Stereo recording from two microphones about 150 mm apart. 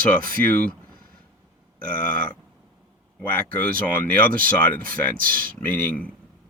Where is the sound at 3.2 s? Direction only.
10° left (ahead or behind).